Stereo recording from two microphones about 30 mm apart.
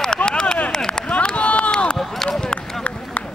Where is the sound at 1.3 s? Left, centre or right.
Left.